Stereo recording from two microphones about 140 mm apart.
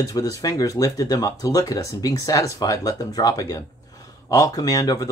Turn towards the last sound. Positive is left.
turn(degrees=25)  # may be behind; listen again after turning